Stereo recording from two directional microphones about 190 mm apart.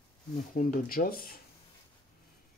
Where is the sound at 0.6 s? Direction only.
45° left (ahead or behind).